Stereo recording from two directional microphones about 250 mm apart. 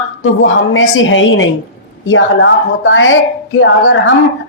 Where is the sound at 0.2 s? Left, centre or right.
Left.